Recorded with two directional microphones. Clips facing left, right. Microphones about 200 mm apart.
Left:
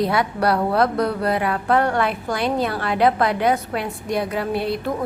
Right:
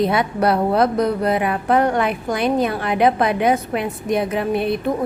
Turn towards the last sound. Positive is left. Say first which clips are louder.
# right 3 dB
turn(degrees=-20)  # may be behind; listen again after turning